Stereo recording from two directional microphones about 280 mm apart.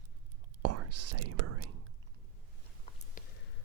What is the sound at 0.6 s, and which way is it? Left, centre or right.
Whispering, right.